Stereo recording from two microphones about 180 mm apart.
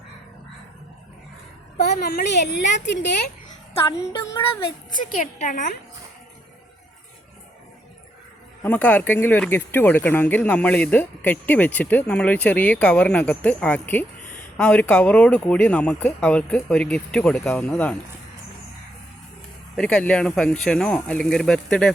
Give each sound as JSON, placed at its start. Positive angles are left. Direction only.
{"t": 1.8, "sound": "a woman's voice", "side_deg": 55}
{"t": 2.8, "sound": "a woman's voice", "side_deg": 80}
{"t": 4.9, "sound": "a woman's voice", "side_deg": 45}
{"t": 8.6, "sound": "speech", "side_deg": 10}
{"t": 19.7, "sound": "speech", "side_deg": 5}